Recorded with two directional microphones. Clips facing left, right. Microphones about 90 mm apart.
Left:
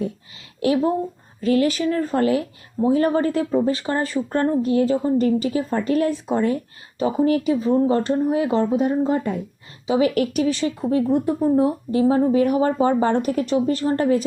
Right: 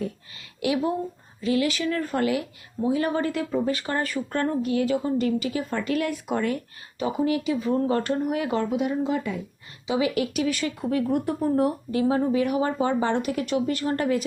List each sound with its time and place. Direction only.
0.6 s speech: 35° left (ahead or behind)
7.0 s speech: 45° left (ahead or behind)
10.5 s speech: 30° left (ahead or behind)